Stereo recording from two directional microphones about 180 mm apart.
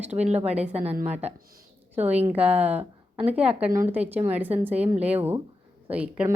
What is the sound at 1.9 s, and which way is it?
Speech, 10° right (ahead or behind).